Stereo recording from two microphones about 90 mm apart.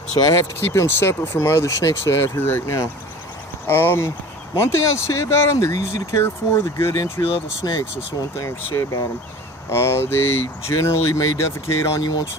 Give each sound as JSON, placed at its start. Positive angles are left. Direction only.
{"t": 0.2, "sound": "speech", "side_deg": 35}
{"t": 7.2, "sound": "speech", "side_deg": 90}
{"t": 7.6, "sound": "speech", "side_deg": 50}
{"t": 8.4, "sound": "speech", "side_deg": 35}